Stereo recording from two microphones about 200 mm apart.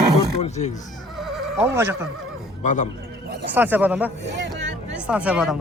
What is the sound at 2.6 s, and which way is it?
Speech, 40° left (ahead or behind).